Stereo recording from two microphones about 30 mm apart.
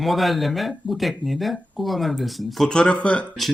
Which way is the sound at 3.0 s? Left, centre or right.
Left.